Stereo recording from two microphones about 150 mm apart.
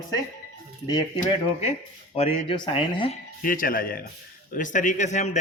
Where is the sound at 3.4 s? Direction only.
65° left (ahead or behind).